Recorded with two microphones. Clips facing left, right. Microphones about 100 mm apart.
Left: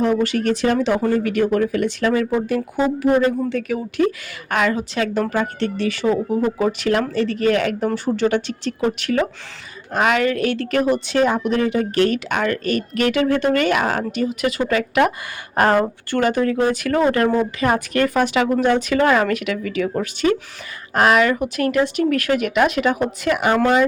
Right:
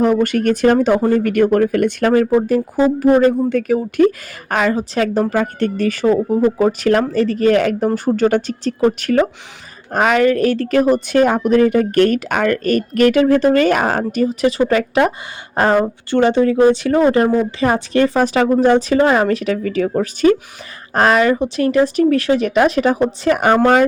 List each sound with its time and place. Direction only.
0.0 s a woman's voice: 45° right (ahead or behind)
2.5 s a woman's voice: 40° right (ahead or behind)
15.7 s speech: 20° right (ahead or behind); by 19.9 s 35° right (ahead or behind)
20.9 s speech: 35° right (ahead or behind)